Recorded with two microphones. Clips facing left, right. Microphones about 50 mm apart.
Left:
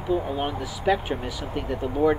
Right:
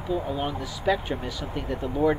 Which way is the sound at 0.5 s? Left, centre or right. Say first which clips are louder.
Left 3 dB; centre.